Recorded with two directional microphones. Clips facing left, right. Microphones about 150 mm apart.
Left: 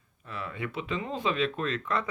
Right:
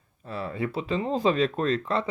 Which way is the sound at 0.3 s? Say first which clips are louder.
Right 6 dB; 35° right (ahead or behind).